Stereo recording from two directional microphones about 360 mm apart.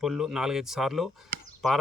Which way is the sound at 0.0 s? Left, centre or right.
Centre.